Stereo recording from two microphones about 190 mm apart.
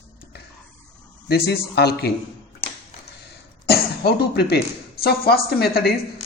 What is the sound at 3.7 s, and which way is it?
Cough, 60° left (ahead or behind).